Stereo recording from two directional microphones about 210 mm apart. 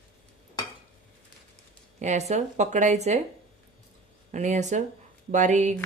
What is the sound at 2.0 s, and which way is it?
A woman's voice, 35° right (ahead or behind).